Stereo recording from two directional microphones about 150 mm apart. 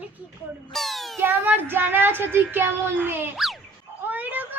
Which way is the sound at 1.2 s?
15° right (ahead or behind).